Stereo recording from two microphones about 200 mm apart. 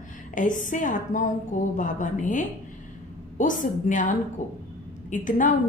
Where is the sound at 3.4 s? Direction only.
40° left (ahead or behind).